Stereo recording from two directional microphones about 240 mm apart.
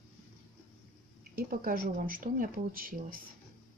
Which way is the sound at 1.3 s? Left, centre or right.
Right.